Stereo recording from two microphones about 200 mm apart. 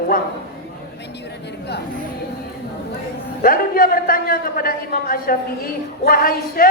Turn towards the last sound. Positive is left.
turn(degrees=45)  # may be behind; listen again after turning